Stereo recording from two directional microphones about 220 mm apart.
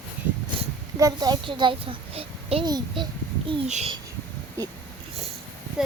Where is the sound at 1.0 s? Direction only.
20° right (ahead or behind).